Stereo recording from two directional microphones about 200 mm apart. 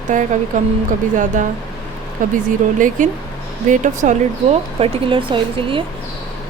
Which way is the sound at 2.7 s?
40° right (ahead or behind).